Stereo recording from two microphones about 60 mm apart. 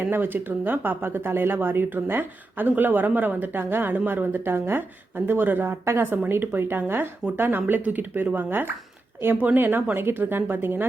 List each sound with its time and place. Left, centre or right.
0.0 s speech: right